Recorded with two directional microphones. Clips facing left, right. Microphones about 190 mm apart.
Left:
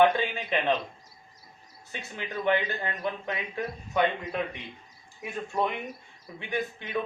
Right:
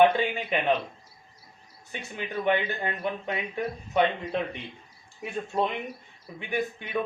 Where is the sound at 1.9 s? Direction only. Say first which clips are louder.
Right 2 dB; 15° right (ahead or behind).